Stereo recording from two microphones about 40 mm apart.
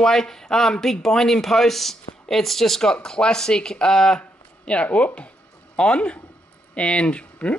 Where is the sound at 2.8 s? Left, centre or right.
Centre.